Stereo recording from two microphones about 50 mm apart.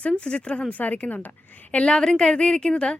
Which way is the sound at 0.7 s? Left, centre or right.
Left.